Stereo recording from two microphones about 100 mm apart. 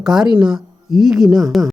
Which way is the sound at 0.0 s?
5° right (ahead or behind).